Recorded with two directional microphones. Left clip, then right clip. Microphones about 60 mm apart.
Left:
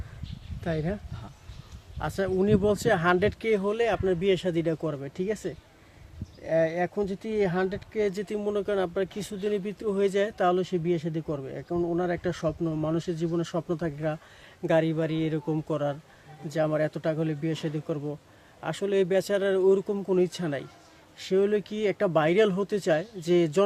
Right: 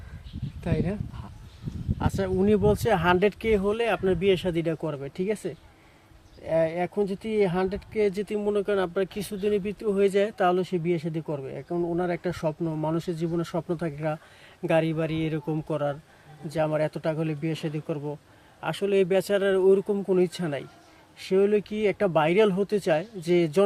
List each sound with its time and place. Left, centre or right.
0.6 s speech: centre
2.0 s speech: centre
2.4 s speech: centre
3.0 s speech: centre
3.7 s speech: centre
4.9 s speech: centre
6.5 s speech: centre